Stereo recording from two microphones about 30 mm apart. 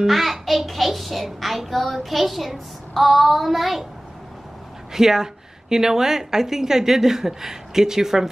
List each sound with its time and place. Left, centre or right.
0.0 s a child's voice: centre
4.9 s a woman's voice: centre